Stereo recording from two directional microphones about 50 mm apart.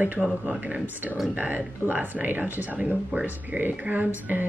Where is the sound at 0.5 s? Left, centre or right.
Right.